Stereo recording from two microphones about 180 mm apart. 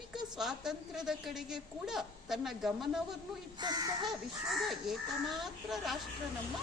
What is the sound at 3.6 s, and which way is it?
Speech, 25° right (ahead or behind).